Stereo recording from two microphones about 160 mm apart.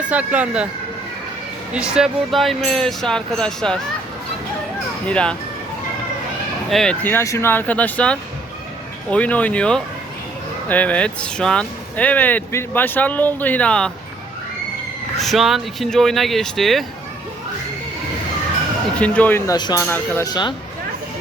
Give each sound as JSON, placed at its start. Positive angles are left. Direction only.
{"t": 0.1, "sound": "speech", "side_deg": -5}
{"t": 1.7, "sound": "speech", "side_deg": -5}
{"t": 5.0, "sound": "speech", "side_deg": 5}
{"t": 6.7, "sound": "speech", "side_deg": 0}
{"t": 7.0, "sound": "speech", "side_deg": 15}
{"t": 15.2, "sound": "speech", "side_deg": 0}
{"t": 18.9, "sound": "speech", "side_deg": 10}
{"t": 19.5, "sound": "speech", "side_deg": 25}